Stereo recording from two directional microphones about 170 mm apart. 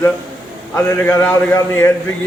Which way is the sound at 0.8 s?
10° left (ahead or behind).